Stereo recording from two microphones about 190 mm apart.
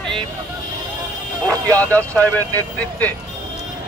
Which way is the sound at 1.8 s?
10° left (ahead or behind).